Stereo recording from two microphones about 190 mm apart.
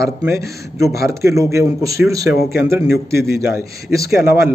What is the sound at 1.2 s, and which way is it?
A man's voice, 15° right (ahead or behind).